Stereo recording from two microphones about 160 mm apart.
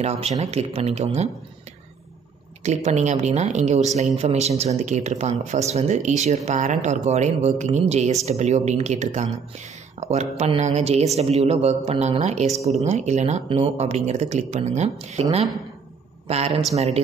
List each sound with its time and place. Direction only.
0.0 s speech: 40° right (ahead or behind)
2.6 s a woman's voice: 45° right (ahead or behind)
16.3 s a woman's voice: 40° right (ahead or behind)